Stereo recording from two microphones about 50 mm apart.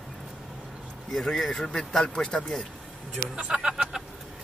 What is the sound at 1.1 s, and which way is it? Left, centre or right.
Speech, centre.